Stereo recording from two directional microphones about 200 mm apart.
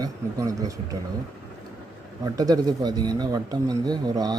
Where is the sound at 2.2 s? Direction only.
20° right (ahead or behind).